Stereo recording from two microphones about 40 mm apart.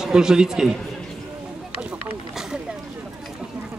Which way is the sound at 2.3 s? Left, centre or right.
Centre.